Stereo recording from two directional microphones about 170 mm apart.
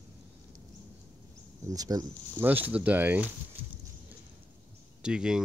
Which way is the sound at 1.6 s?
20° right (ahead or behind).